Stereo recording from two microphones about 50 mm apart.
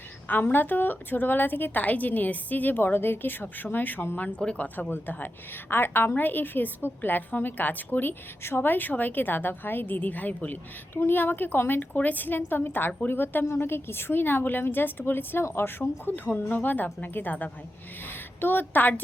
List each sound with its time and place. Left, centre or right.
0.3 s a woman's voice: left
4.9 s a woman's voice: left
10.9 s a woman's voice: left
11.9 s a woman's voice: left
15.8 s a woman's voice: left